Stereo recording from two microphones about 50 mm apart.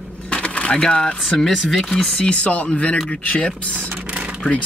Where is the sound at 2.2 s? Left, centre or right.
Left.